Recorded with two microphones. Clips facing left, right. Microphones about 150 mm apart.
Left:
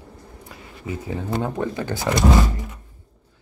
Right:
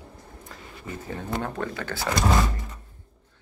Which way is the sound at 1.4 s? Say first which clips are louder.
Left 5 dB; 15° left (ahead or behind).